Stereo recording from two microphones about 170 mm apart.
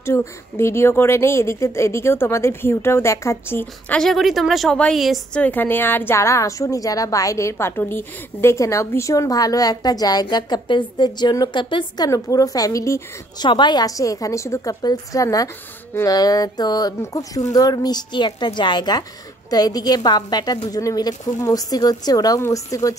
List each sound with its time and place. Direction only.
0.0 s a woman's voice: 15° left (ahead or behind)
4.0 s a woman's voice: centre (ahead or behind); by 22.9 s 20° left (ahead or behind)